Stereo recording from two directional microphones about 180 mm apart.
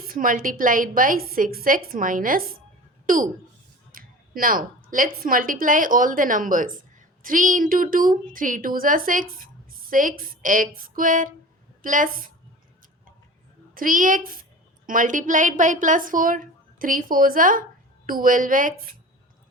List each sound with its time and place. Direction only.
0.0 s a woman's voice: 50° right (ahead or behind)
13.7 s a woman's voice: 50° right (ahead or behind)